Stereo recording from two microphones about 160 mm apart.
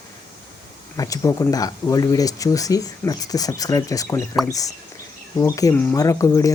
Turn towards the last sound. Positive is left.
turn(degrees=20)  # may be behind; listen again after turning